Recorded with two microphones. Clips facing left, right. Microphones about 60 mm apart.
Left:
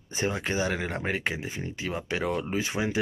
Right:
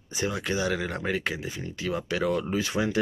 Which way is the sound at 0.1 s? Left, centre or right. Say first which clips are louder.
Even; left.